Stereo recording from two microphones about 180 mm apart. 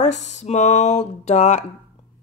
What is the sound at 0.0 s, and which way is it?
Speech, 40° left (ahead or behind).